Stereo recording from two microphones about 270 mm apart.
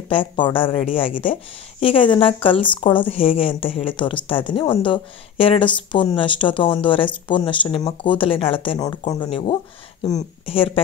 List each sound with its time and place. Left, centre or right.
0.1 s a woman's voice: centre